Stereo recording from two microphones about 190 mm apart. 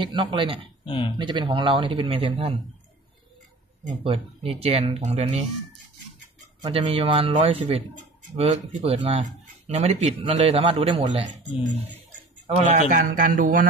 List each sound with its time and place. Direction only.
0.0 s speech: 25° right (ahead or behind)
0.8 s speech: 25° left (ahead or behind)
1.1 s speech: 25° right (ahead or behind)
3.8 s speech: 30° right (ahead or behind)
6.6 s speech: 30° right (ahead or behind)
12.4 s speech: 35° right (ahead or behind)
12.9 s speech: 45° right (ahead or behind)